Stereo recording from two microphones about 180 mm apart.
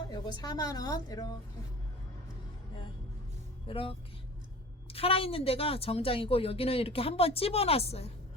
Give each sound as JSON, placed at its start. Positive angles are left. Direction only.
{"t": 0.1, "sound": "a woman's voice", "side_deg": 20}
{"t": 3.7, "sound": "speech", "side_deg": 30}